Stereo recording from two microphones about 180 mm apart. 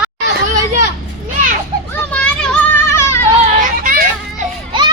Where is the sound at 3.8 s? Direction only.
50° right (ahead or behind).